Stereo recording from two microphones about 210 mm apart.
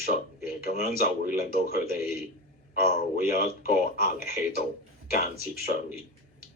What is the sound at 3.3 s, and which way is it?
Speech, 45° left (ahead or behind).